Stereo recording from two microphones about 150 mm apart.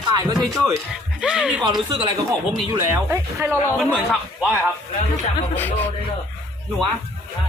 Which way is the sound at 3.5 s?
10° left (ahead or behind).